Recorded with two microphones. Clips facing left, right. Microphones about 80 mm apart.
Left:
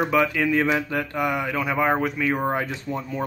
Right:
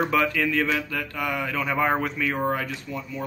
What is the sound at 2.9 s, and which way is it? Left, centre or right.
Speech, left.